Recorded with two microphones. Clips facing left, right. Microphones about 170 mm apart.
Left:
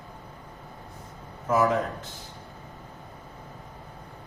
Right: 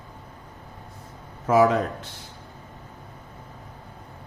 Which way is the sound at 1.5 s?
80° right.